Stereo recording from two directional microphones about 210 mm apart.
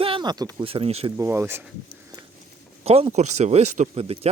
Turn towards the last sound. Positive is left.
turn(degrees=-30)  # may be behind; listen again after turning